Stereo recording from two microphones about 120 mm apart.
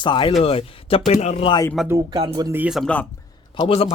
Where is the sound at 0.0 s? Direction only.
45° left (ahead or behind).